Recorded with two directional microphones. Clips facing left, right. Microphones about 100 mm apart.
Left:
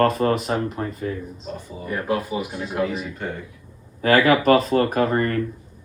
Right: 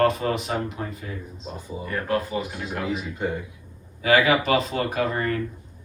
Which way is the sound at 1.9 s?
15° left (ahead or behind).